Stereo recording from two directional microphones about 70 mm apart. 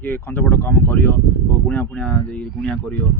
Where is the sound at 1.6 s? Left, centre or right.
Centre.